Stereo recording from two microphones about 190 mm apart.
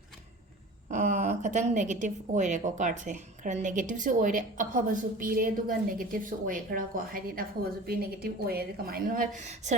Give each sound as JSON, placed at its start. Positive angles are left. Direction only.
{"t": 0.9, "sound": "a woman's voice", "side_deg": -45}